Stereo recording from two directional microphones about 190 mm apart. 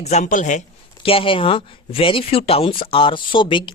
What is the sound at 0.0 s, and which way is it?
Speech, 35° left (ahead or behind).